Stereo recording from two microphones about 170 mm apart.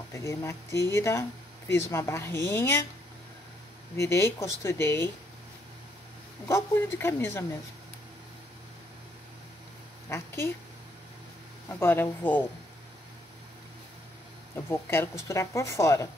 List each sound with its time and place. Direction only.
0.1 s speech: 15° left (ahead or behind)
3.9 s speech: 15° left (ahead or behind)
6.4 s speech: 15° left (ahead or behind)
10.0 s speech: 15° left (ahead or behind)
11.8 s speech: 10° left (ahead or behind)
14.5 s speech: 15° left (ahead or behind)